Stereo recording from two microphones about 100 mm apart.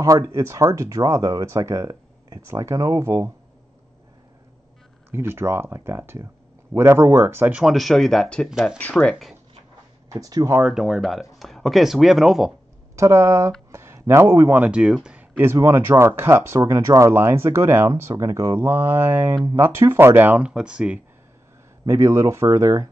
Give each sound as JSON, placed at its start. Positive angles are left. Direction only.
{"t": 0.0, "sound": "speech", "side_deg": -35}
{"t": 5.1, "sound": "speech", "side_deg": -25}
{"t": 7.5, "sound": "speech", "side_deg": 0}
{"t": 9.1, "sound": "speech", "side_deg": -5}
{"t": 10.2, "sound": "speech", "side_deg": -35}
{"t": 10.7, "sound": "speech", "side_deg": 0}
{"t": 12.9, "sound": "speech", "side_deg": -30}
{"t": 13.7, "sound": "a sound", "side_deg": -25}
{"t": 14.6, "sound": "speech", "side_deg": -10}
{"t": 21.8, "sound": "speech", "side_deg": -30}